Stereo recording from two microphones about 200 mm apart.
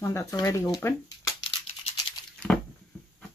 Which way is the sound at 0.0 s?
15° left (ahead or behind).